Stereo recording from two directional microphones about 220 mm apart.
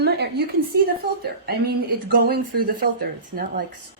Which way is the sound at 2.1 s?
45° right (ahead or behind).